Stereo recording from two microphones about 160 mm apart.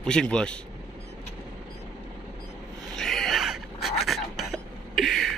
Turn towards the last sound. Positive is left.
turn(degrees=0)  # may be behind; listen again after turning